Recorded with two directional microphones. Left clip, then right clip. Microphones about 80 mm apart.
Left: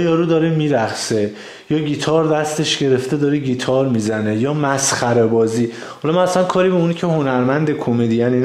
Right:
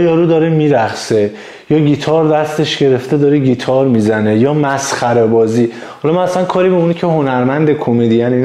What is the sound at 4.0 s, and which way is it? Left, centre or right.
Speech, right.